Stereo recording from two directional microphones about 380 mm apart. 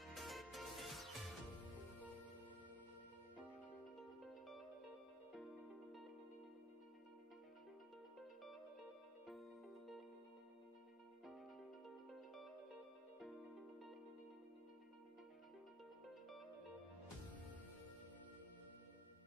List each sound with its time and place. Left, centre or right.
0.0 s music: centre
4.2 s music: centre
9.2 s music: centre
12.1 s music: centre
16.1 s music: centre